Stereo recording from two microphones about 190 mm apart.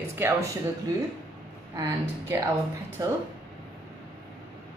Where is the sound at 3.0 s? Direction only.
15° right (ahead or behind).